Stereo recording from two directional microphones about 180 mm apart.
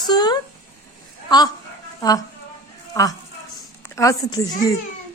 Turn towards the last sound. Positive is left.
turn(degrees=20)  # may be behind; listen again after turning